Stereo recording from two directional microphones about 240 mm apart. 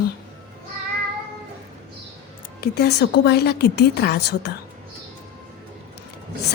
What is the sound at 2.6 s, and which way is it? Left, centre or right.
A woman's voice, left.